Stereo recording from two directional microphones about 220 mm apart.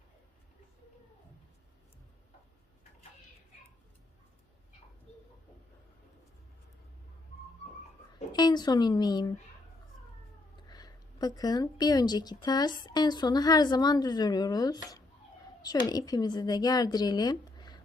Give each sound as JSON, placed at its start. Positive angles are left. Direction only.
{"t": 8.3, "sound": "speech", "side_deg": 20}
{"t": 10.7, "sound": "a woman's voice", "side_deg": 20}